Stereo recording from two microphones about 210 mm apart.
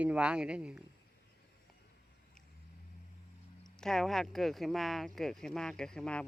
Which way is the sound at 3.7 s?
Centre (ahead or behind).